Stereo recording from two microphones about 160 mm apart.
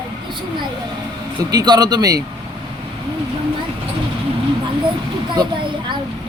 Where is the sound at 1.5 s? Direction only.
25° right (ahead or behind).